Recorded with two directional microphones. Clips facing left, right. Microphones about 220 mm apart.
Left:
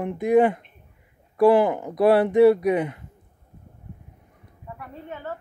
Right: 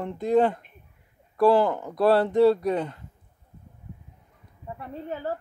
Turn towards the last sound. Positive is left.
turn(degrees=-35)  # may be behind; listen again after turning